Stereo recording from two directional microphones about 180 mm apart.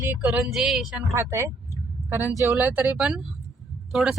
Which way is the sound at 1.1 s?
15° right (ahead or behind).